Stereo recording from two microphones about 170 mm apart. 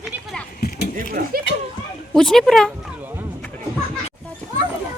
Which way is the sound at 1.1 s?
60° right (ahead or behind).